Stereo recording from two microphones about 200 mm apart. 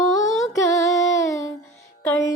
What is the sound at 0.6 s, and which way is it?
Female singing, 15° left (ahead or behind).